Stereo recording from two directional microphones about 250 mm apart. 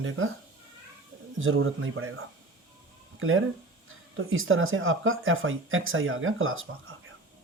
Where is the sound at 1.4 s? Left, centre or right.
Right.